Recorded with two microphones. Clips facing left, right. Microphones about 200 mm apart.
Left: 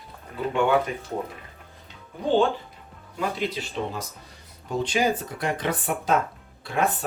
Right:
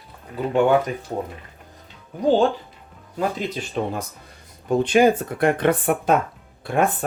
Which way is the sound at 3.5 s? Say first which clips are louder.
Right 5 dB; 55° right (ahead or behind).